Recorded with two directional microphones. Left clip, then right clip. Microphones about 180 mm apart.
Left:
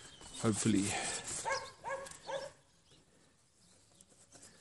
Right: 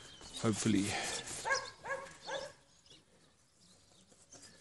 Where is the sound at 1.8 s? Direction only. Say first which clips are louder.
Even; 15° right (ahead or behind).